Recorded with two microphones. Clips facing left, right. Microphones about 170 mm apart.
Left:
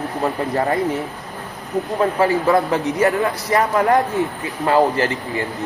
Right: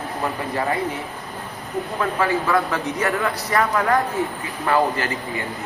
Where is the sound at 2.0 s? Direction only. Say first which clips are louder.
Left 4 dB; 30° left (ahead or behind).